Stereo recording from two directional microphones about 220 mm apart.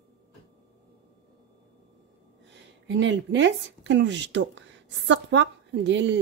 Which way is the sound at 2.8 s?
55° right (ahead or behind).